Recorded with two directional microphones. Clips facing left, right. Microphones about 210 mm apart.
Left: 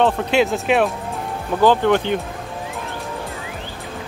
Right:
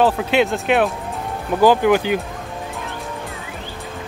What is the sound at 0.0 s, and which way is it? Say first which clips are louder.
Speech: even; centre (ahead or behind).